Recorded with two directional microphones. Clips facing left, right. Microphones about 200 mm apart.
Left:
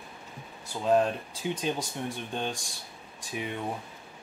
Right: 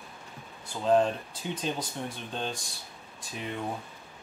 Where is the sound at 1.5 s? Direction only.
10° left (ahead or behind).